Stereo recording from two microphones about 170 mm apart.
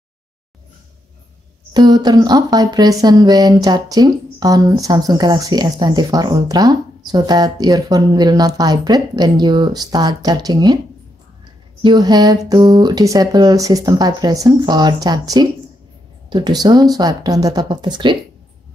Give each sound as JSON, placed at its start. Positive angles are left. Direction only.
{"t": 1.7, "sound": "speech", "side_deg": -25}
{"t": 11.8, "sound": "speech", "side_deg": -25}